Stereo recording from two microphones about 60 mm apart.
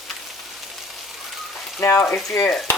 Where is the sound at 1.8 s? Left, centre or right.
Left.